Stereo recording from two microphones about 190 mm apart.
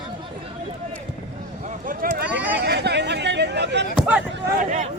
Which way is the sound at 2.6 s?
60° right (ahead or behind).